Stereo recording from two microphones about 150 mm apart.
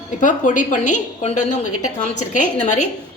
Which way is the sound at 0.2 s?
60° left (ahead or behind).